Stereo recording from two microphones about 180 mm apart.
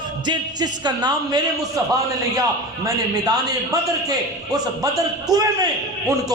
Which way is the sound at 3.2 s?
20° right (ahead or behind).